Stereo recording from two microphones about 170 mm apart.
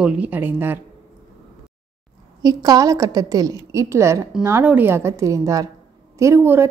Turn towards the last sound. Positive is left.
turn(degrees=-15)  # may be behind; listen again after turning